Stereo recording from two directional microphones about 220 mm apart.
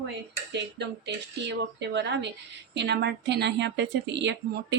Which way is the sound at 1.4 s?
50° right (ahead or behind).